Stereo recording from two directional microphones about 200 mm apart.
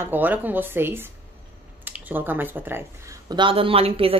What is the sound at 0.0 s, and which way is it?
A woman's voice, 10° right (ahead or behind).